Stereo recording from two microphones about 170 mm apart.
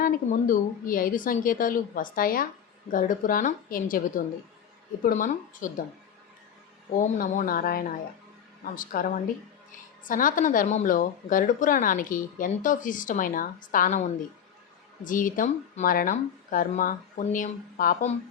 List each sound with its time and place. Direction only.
0.0 s a woman's voice: 55° left (ahead or behind)
7.2 s a woman's voice: 55° left (ahead or behind)
15.0 s a woman's voice: 50° left (ahead or behind)